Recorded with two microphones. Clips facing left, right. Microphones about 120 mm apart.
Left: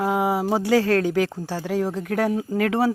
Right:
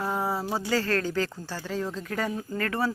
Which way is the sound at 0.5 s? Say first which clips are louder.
Left 8 dB; 75° left (ahead or behind).